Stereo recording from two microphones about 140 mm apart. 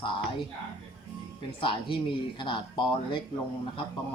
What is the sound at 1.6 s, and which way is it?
Speech, 35° left (ahead or behind).